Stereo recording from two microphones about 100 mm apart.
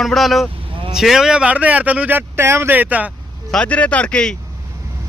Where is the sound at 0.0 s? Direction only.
Centre (ahead or behind); by 3.1 s 15° right (ahead or behind).